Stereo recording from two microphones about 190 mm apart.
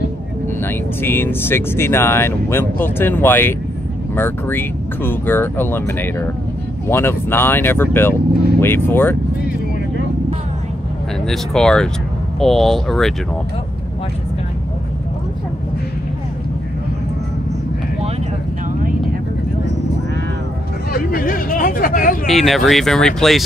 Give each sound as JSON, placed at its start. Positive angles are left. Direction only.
{"t": 1.0, "sound": "speech", "side_deg": 10}
{"t": 11.2, "sound": "speech", "side_deg": 0}
{"t": 20.9, "sound": "a sound", "side_deg": 50}
{"t": 22.2, "sound": "speech", "side_deg": 0}